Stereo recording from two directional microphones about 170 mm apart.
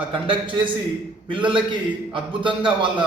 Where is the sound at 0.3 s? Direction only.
30° right (ahead or behind).